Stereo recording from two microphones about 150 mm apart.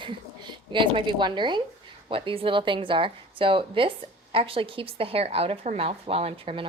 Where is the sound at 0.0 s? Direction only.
30° right (ahead or behind).